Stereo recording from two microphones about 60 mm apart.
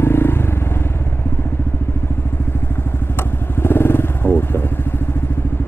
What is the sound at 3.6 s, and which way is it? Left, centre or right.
Motorcycle, left.